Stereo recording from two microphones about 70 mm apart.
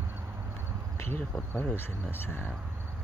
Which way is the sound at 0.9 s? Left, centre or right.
Left.